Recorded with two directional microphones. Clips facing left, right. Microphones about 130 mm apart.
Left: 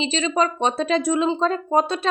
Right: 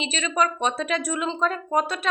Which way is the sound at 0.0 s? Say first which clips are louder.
Left 3 dB; 30° left (ahead or behind).